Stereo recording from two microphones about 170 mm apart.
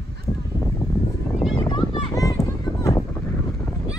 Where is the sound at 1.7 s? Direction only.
20° left (ahead or behind).